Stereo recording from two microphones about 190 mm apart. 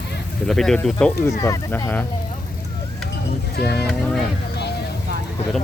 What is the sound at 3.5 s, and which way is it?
Speech, 60° left (ahead or behind).